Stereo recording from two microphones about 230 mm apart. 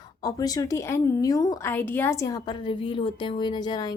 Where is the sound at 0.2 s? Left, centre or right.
Centre.